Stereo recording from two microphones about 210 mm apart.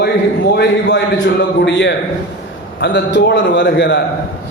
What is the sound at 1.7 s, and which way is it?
A man's voice, 60° left (ahead or behind).